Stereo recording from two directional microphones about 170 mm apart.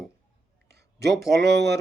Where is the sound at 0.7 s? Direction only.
80° right.